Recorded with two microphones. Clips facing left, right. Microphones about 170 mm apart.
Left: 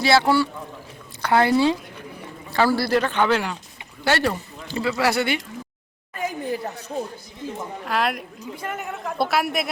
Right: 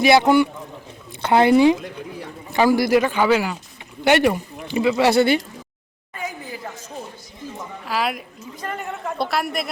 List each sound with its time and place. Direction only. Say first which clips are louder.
0.0 s a man's voice: right 4 dB; 15° right (ahead or behind)
4.0 s speech: right 5 dB; 15° right (ahead or behind); by 5.4 s 30° right (ahead or behind)
7.9 s a woman's voice: even; centre (ahead or behind)